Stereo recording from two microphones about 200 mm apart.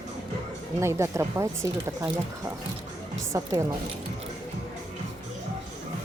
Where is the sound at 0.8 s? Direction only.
15° right (ahead or behind).